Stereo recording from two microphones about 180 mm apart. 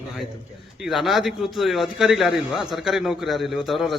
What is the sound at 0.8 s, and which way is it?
A man's voice, centre (ahead or behind).